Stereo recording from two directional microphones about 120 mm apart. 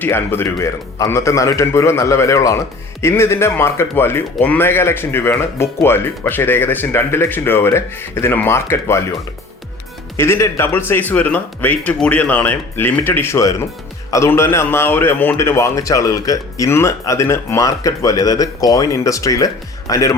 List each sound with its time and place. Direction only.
0.0 s speech: 20° left (ahead or behind)
10.2 s speech: 20° left (ahead or behind)